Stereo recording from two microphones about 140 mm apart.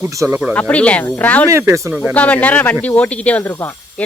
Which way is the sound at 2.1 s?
10° left (ahead or behind).